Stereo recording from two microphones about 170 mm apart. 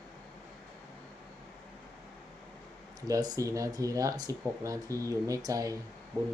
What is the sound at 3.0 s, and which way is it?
Speech, 20° right (ahead or behind).